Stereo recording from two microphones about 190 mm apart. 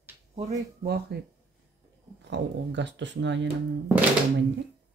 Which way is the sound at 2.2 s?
70° right (ahead or behind).